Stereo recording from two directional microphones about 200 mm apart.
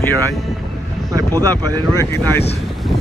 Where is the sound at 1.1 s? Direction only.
15° right (ahead or behind).